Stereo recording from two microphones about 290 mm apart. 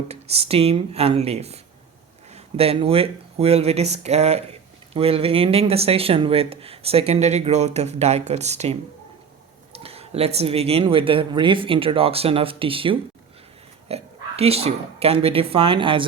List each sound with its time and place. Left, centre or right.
0.1 s speech: right